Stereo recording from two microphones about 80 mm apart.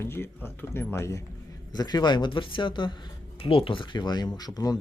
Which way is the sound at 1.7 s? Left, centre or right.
Left.